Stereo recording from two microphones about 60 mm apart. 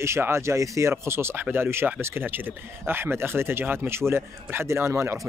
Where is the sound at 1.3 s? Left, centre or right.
Right.